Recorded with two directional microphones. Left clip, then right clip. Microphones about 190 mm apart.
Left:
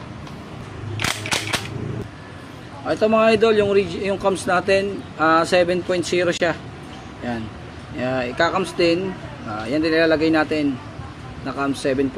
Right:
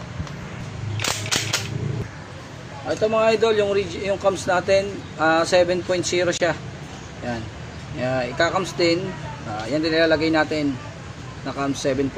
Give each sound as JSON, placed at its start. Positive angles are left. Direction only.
{"t": 2.9, "sound": "speech", "side_deg": 30}
{"t": 8.0, "sound": "speech", "side_deg": 15}